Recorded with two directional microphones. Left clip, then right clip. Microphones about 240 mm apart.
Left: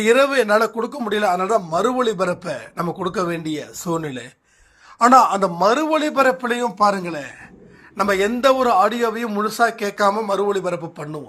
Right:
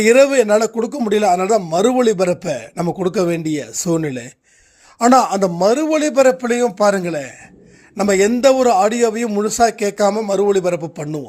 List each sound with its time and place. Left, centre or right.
0.0 s speech: right